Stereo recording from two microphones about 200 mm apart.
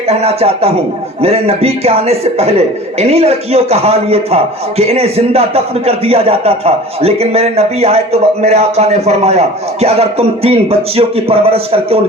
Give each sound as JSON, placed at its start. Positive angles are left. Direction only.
{"t": 0.1, "sound": "speech", "side_deg": -30}